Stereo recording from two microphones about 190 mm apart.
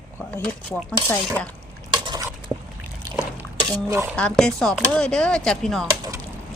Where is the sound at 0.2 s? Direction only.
10° left (ahead or behind).